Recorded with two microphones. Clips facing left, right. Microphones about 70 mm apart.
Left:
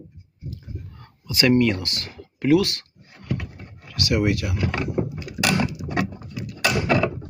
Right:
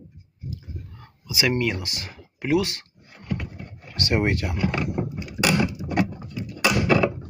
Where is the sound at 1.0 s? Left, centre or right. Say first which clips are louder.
Left 4 dB; centre.